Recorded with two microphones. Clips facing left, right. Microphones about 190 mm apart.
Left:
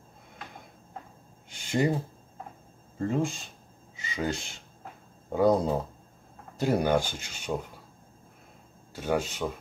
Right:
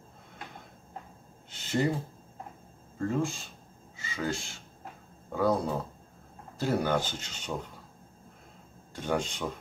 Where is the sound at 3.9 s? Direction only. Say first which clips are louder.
Left 2 dB; 20° left (ahead or behind).